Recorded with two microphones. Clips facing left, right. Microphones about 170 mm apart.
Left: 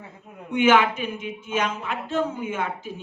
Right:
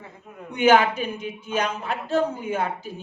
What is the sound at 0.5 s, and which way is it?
A man's voice, 40° right (ahead or behind).